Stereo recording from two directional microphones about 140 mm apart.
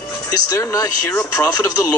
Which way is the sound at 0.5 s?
20° left (ahead or behind).